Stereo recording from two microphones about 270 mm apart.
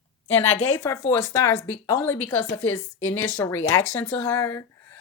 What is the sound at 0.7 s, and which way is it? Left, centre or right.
Speech, centre.